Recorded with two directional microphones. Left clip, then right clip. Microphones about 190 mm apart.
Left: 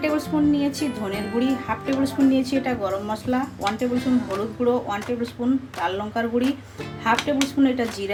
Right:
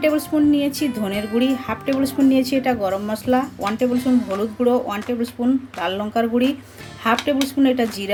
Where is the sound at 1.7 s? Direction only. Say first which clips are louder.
Right 2 dB; 50° right (ahead or behind).